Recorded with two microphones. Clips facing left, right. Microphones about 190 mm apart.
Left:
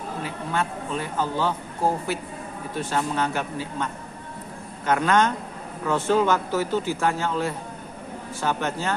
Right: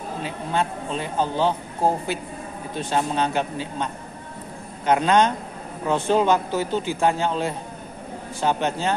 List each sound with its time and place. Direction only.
0.2 s a man's voice: 20° right (ahead or behind)